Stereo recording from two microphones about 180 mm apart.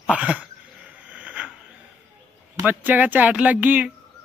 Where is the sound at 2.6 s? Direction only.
10° right (ahead or behind).